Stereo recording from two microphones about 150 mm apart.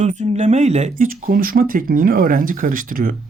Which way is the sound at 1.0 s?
65° right (ahead or behind).